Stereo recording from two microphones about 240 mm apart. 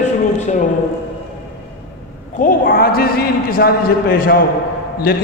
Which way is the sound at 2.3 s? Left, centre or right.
Left.